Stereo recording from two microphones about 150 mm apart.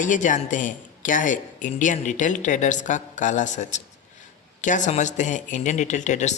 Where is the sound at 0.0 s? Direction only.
60° left (ahead or behind).